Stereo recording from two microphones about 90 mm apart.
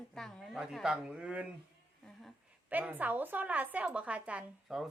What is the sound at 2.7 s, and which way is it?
A woman's voice, 20° right (ahead or behind).